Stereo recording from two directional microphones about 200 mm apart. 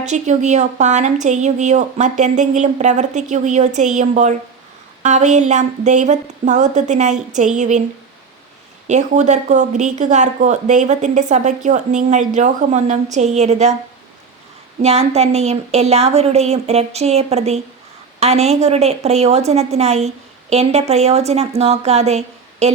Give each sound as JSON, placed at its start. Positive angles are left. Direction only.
{"t": 0.0, "sound": "speech", "side_deg": -35}
{"t": 8.9, "sound": "speech", "side_deg": -35}
{"t": 14.8, "sound": "speech", "side_deg": -30}